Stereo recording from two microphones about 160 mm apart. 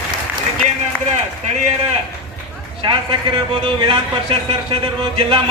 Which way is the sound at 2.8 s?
30° right (ahead or behind).